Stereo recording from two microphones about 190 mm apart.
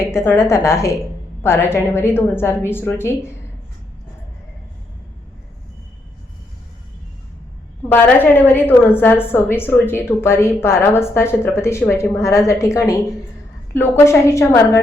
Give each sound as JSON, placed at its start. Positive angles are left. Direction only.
{"t": 0.1, "sound": "a woman's voice", "side_deg": 15}
{"t": 7.9, "sound": "a woman's voice", "side_deg": 10}